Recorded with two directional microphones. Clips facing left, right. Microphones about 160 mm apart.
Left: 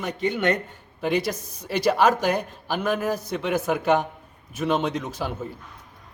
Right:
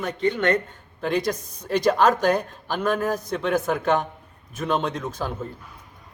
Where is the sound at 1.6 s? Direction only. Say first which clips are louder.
Right 1 dB; 5° left (ahead or behind).